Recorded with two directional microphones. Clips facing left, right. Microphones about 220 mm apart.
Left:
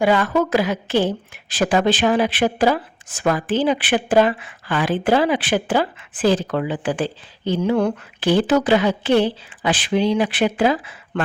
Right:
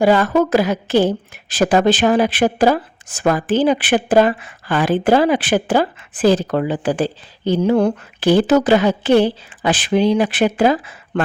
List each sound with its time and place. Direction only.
0.0 s a woman's voice: 40° right (ahead or behind)